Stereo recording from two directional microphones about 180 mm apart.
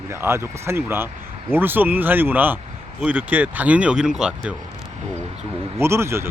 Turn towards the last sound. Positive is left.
turn(degrees=-15)  # may be behind; listen again after turning